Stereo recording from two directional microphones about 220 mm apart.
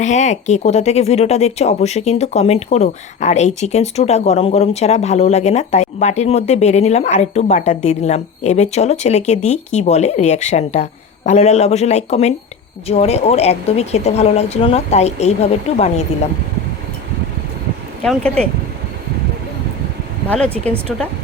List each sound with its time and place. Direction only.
0.0 s speech: 30° left (ahead or behind)
18.0 s speech: 5° left (ahead or behind)
20.2 s speech: 5° left (ahead or behind)